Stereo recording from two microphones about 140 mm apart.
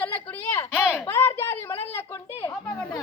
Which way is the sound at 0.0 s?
10° left (ahead or behind).